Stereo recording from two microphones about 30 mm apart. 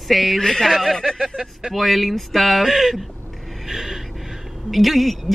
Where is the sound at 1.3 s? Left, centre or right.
Centre.